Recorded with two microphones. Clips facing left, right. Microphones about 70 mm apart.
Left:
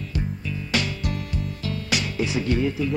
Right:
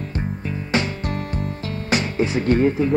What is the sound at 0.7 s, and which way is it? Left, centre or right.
Music, right.